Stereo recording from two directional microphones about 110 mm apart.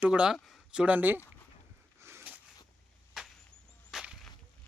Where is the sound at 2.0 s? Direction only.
20° right (ahead or behind).